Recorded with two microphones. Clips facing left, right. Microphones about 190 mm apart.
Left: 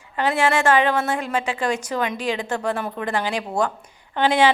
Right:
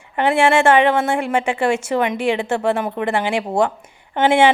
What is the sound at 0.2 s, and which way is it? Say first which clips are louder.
Speech: right 5 dB; 25° right (ahead or behind).